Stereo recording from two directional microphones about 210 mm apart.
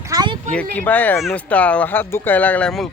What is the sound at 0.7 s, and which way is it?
Speech, 10° left (ahead or behind).